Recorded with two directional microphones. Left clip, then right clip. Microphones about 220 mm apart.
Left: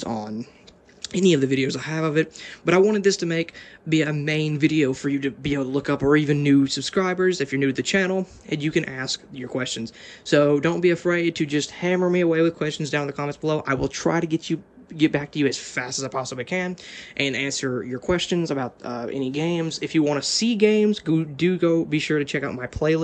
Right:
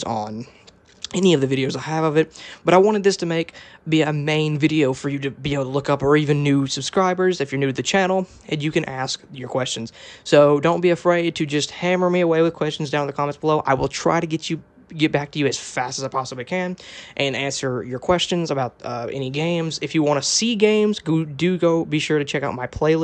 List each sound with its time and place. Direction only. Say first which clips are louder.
1.0 s speech: right 2 dB; 15° right (ahead or behind)